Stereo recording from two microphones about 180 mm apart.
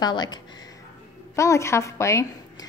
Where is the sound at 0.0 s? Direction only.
25° left (ahead or behind).